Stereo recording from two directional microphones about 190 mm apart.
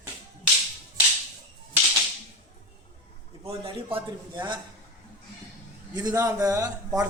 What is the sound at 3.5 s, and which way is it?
A man's voice, 30° right (ahead or behind).